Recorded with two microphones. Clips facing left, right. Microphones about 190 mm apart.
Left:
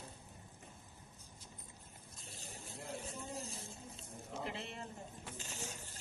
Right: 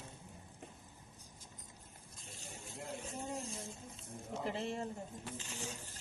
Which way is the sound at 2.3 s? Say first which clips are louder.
Right 1 dB; 35° left (ahead or behind).